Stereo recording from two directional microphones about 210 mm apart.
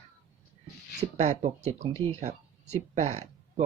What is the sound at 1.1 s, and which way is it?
Speech, 30° right (ahead or behind).